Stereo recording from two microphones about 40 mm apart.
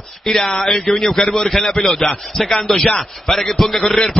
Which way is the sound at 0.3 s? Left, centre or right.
Centre.